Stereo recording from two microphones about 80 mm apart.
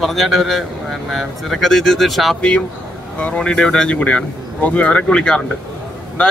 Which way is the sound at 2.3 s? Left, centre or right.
Centre.